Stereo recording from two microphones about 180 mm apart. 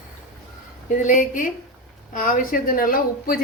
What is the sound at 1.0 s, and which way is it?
Speech, 45° left (ahead or behind).